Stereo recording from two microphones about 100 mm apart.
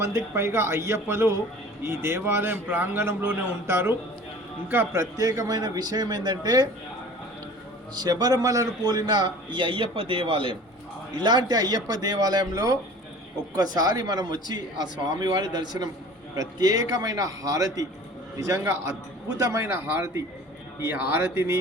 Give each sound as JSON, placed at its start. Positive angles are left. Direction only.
{"t": 0.0, "sound": "a man's voice", "side_deg": -25}
{"t": 5.1, "sound": "a man's voice", "side_deg": -35}
{"t": 7.9, "sound": "a man's voice", "side_deg": -40}
{"t": 11.2, "sound": "a man's voice", "side_deg": -45}